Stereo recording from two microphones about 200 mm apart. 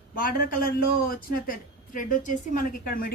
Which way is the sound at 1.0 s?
45° left (ahead or behind).